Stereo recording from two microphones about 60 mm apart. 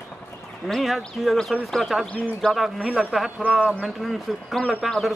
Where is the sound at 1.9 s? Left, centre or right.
Centre.